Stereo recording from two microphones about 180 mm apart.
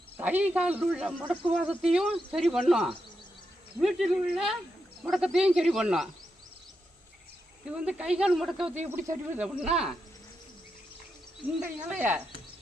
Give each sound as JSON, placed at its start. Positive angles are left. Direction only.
{"t": 0.2, "sound": "a man's voice", "side_deg": -10}
{"t": 7.8, "sound": "a man's voice", "side_deg": -5}
{"t": 11.6, "sound": "a man's voice", "side_deg": -10}